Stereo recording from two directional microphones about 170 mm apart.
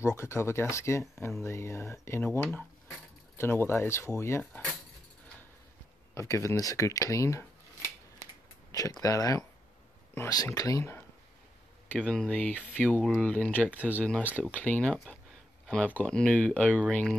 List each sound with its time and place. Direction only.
0.0 s speech: 15° left (ahead or behind)
6.1 s speech: 15° left (ahead or behind)
12.0 s speech: 5° left (ahead or behind)